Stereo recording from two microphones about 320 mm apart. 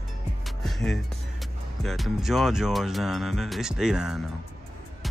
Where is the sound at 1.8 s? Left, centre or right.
Centre.